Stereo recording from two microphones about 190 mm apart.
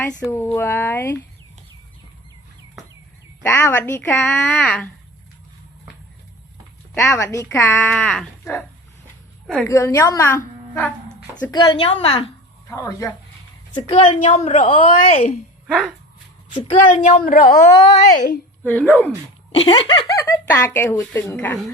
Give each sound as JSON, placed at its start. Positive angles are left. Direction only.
{"t": 0.0, "sound": "a woman's voice", "side_deg": 15}
{"t": 3.4, "sound": "a woman's voice", "side_deg": 10}
{"t": 7.0, "sound": "a woman's voice", "side_deg": 15}
{"t": 7.9, "sound": "speech", "side_deg": 0}
{"t": 9.5, "sound": "a woman's voice", "side_deg": 10}
{"t": 11.5, "sound": "a woman's voice", "side_deg": 25}
{"t": 12.6, "sound": "a woman's voice", "side_deg": 15}
{"t": 13.7, "sound": "a woman's voice", "side_deg": 25}
{"t": 15.6, "sound": "speech", "side_deg": -5}
{"t": 16.6, "sound": "a woman's voice", "side_deg": 35}
{"t": 18.6, "sound": "a woman's voice", "side_deg": 10}
{"t": 19.5, "sound": "a woman's voice", "side_deg": 30}
{"t": 20.2, "sound": "a woman's voice", "side_deg": 15}